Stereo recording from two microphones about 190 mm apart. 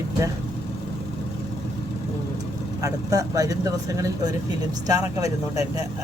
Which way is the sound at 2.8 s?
20° right (ahead or behind).